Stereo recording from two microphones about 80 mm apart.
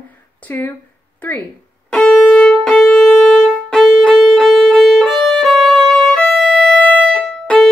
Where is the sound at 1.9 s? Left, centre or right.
Centre.